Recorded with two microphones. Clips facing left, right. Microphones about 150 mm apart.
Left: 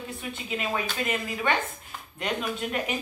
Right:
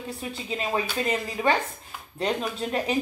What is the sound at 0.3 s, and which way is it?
Speech, 35° right (ahead or behind).